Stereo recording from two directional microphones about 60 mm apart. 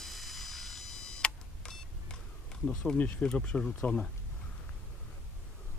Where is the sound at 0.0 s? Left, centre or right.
Centre.